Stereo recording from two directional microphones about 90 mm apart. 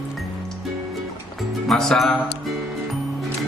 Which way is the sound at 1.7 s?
5° left (ahead or behind).